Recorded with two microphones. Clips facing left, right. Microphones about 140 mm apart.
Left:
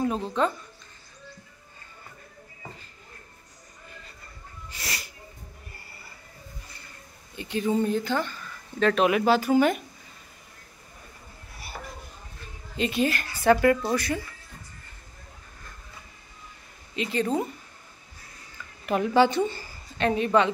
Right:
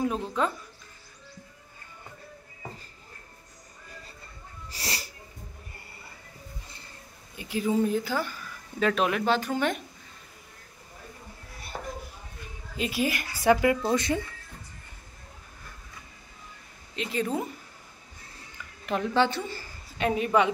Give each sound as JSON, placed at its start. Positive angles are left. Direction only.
{"t": 0.0, "sound": "speech", "side_deg": 0}
{"t": 4.6, "sound": "a sound", "side_deg": -30}
{"t": 7.3, "sound": "speech", "side_deg": -5}
{"t": 12.7, "sound": "speech", "side_deg": -5}
{"t": 16.9, "sound": "speech", "side_deg": 0}
{"t": 18.9, "sound": "speech", "side_deg": 10}
{"t": 20.0, "sound": "speech", "side_deg": -5}